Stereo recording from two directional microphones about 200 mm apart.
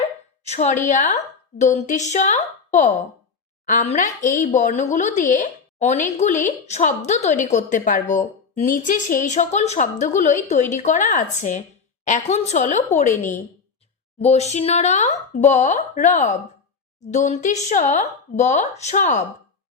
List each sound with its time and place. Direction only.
0.4 s a woman's voice: 35° left (ahead or behind)